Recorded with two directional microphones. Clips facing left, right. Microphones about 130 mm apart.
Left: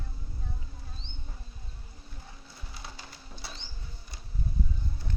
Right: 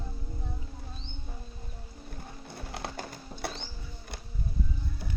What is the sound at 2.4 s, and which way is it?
Music, 60° right (ahead or behind).